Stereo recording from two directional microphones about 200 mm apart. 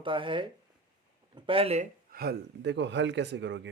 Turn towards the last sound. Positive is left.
turn(degrees=-60)  # may be behind; listen again after turning